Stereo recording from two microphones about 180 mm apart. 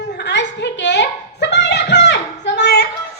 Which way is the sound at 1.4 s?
70° left (ahead or behind).